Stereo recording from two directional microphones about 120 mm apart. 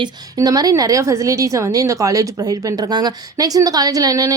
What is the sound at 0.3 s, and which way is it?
A woman's voice, 30° right (ahead or behind).